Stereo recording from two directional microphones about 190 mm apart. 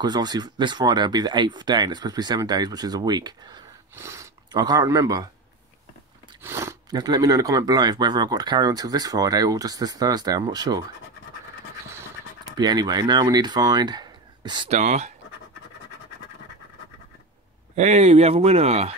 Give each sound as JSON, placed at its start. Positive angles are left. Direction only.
{"t": 0.0, "sound": "speech", "side_deg": -20}
{"t": 6.4, "sound": "speech", "side_deg": -15}
{"t": 12.4, "sound": "speech", "side_deg": -20}
{"t": 14.8, "sound": "speech", "side_deg": -40}
{"t": 17.7, "sound": "speech", "side_deg": -35}